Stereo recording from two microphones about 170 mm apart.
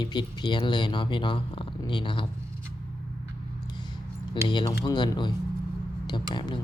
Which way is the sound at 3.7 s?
25° left (ahead or behind).